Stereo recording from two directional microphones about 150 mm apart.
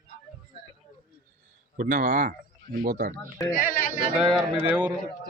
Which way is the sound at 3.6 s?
60° left (ahead or behind).